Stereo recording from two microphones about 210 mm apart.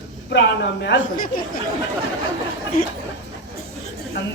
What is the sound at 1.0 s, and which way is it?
Speech, 40° left (ahead or behind).